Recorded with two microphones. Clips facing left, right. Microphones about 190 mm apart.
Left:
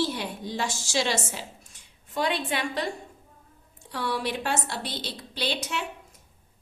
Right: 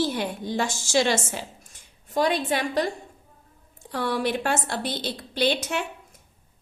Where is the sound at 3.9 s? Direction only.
50° right (ahead or behind).